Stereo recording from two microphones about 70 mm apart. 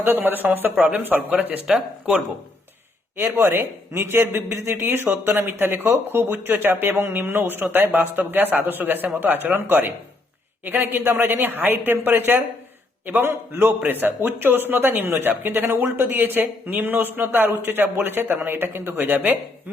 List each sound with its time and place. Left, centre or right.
0.0 s a man's voice: right
1.6 s speech: centre
3.3 s a man's voice: right